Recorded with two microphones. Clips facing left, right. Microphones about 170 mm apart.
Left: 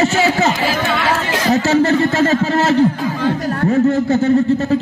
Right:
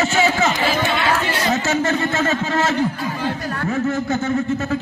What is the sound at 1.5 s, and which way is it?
Speech, 35° left (ahead or behind).